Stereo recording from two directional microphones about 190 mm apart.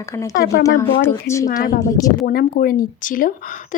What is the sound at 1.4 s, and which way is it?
Speech, 45° left (ahead or behind).